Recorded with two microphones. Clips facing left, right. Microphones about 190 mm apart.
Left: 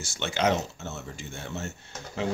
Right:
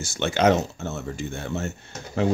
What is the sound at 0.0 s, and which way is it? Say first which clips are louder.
Speech: right 6 dB; 50° right (ahead or behind).